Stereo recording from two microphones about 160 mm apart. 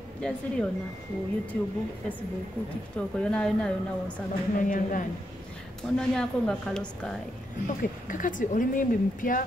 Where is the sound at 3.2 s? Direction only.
5° left (ahead or behind).